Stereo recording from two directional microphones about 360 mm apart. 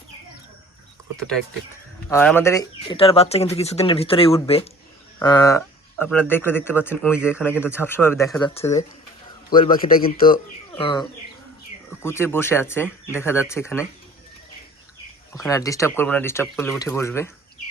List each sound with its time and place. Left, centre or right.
2.0 s speech: centre
9.6 s a man's voice: left; by 13.8 s centre
15.3 s speech: centre